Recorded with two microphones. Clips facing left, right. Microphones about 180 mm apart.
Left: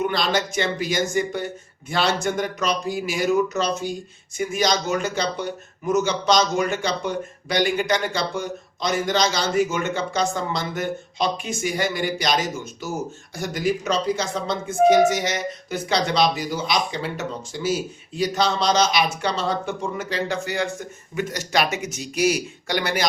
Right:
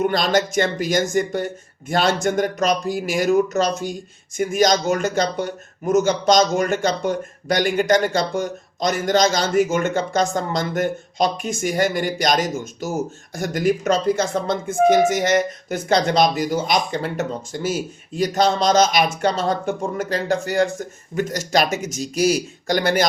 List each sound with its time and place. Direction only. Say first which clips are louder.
0.0 s speech: right 4 dB; 45° right (ahead or behind)